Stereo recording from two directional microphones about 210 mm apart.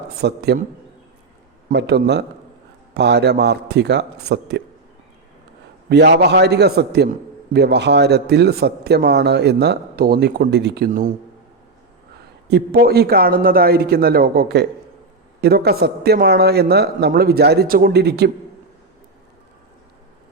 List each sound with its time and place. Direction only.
0.2 s a man's voice: 50° right (ahead or behind)
1.7 s a man's voice: 50° right (ahead or behind)
5.9 s a man's voice: 55° right (ahead or behind)
12.5 s a man's voice: 50° right (ahead or behind)